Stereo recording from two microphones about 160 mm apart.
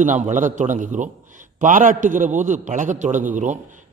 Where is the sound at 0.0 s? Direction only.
50° right (ahead or behind).